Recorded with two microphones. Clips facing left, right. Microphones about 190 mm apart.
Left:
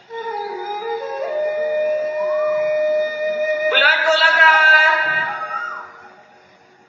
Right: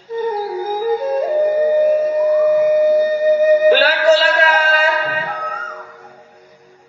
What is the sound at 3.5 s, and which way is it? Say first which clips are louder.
Music: right 8 dB; 35° right (ahead or behind).